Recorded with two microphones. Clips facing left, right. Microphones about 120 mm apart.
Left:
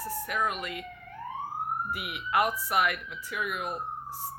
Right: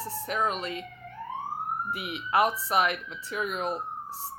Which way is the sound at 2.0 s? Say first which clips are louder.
Right 3 dB; 30° right (ahead or behind).